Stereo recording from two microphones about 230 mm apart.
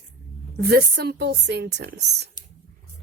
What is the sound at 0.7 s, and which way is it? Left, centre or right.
Speech, right.